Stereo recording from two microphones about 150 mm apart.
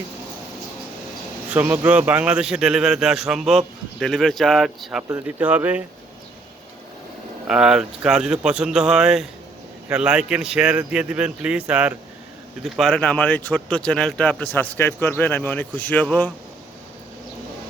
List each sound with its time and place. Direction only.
1.5 s a man's voice: 10° right (ahead or behind)
7.4 s a man's voice: 5° right (ahead or behind)